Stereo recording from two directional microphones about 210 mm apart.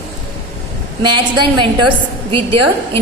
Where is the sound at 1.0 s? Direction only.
20° right (ahead or behind).